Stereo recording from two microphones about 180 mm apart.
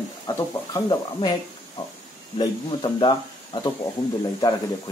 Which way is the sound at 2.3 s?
25° left (ahead or behind).